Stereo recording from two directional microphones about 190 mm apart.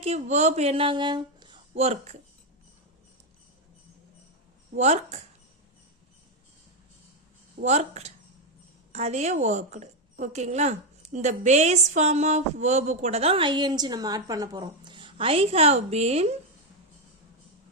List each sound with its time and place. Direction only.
0.0 s speech: 35° right (ahead or behind)
4.7 s speech: 35° right (ahead or behind)
7.6 s a woman's voice: 35° right (ahead or behind)